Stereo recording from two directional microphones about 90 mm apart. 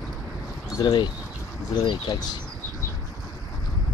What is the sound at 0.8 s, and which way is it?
Speech, 55° left (ahead or behind).